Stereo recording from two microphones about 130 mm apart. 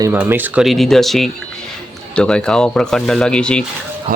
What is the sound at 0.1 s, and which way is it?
Speech, 15° right (ahead or behind).